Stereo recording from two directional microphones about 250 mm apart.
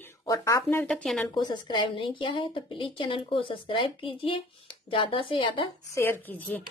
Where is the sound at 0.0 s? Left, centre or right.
Centre.